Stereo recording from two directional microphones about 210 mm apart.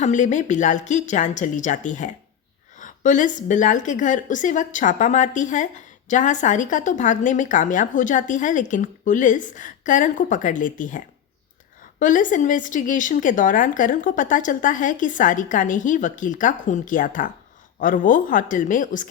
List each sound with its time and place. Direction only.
0.0 s a woman's voice: 35° left (ahead or behind)